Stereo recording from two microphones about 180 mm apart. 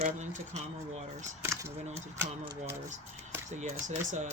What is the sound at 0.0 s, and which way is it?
Speech, 40° right (ahead or behind).